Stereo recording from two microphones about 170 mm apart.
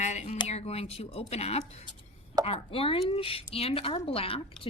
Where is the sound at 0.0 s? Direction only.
45° left (ahead or behind).